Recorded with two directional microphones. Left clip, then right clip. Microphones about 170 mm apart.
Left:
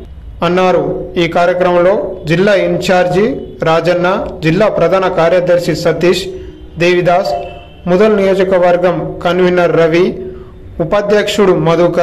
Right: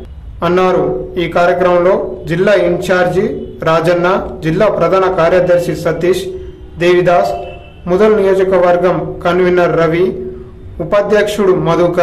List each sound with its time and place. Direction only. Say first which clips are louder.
0.4 s a man's voice: left 1 dB; 20° left (ahead or behind)